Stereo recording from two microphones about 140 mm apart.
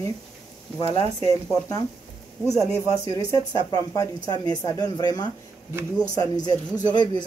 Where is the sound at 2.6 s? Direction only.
20° left (ahead or behind).